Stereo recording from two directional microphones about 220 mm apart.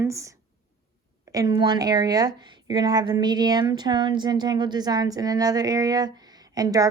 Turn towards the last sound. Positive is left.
turn(degrees=-15)  # may be behind; listen again after turning